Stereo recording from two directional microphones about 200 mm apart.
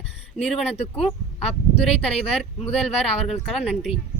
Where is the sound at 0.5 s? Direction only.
30° left (ahead or behind).